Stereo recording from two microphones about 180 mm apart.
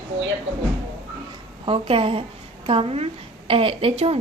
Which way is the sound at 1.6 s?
30° right (ahead or behind).